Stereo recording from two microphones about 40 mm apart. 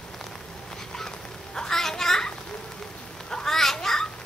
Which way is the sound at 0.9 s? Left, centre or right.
Centre.